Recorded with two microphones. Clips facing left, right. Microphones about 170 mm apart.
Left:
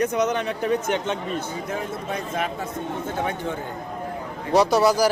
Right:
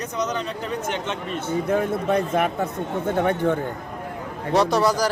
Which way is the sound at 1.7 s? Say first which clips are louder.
Right 7 dB; 60° right (ahead or behind).